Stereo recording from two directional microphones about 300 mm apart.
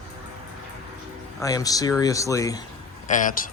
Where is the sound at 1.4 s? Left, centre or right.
Centre.